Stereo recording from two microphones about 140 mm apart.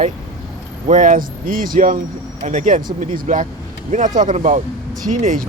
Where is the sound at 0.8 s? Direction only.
65° right (ahead or behind).